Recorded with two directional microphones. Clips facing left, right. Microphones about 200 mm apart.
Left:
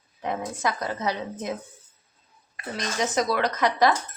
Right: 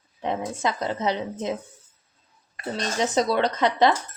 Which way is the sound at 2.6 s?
30° right (ahead or behind).